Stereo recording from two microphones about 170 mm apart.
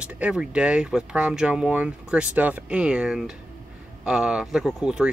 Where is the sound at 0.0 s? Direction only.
5° right (ahead or behind).